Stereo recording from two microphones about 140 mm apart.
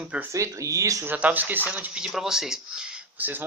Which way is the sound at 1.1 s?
10° right (ahead or behind).